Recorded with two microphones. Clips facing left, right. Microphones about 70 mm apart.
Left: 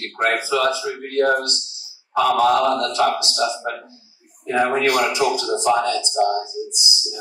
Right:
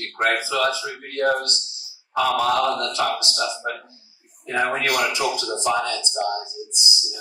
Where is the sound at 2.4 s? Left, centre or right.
Left.